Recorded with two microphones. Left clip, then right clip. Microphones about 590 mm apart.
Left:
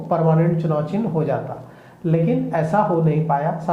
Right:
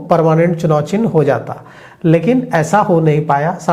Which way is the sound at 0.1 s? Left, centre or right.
Right.